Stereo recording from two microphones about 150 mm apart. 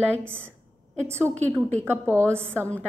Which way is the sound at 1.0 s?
15° right (ahead or behind).